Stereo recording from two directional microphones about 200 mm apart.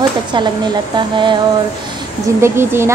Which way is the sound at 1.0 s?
25° right (ahead or behind).